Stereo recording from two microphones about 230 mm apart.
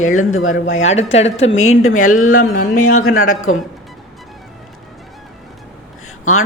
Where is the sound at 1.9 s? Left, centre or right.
Left.